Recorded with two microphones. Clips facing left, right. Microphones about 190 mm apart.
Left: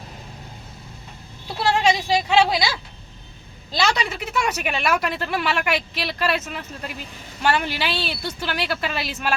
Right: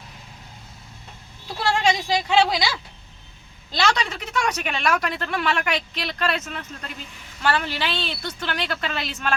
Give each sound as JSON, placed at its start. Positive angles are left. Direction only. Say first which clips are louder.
{"t": 1.6, "sound": "a woman's voice", "louder": "left 2 dB", "side_deg": 5}